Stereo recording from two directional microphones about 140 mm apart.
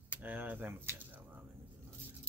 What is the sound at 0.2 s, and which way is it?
Speech, 10° right (ahead or behind).